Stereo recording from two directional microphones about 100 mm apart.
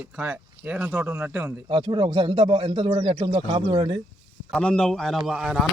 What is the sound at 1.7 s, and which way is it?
Speech, 55° right (ahead or behind).